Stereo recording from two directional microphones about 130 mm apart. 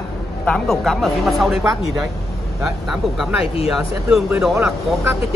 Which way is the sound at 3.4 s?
50° left (ahead or behind).